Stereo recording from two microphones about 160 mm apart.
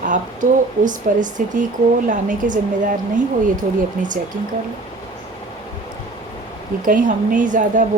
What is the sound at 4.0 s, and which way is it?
Speech, 55° right (ahead or behind).